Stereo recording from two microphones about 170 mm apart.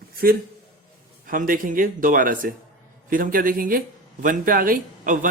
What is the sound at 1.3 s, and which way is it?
Speech, 55° right (ahead or behind).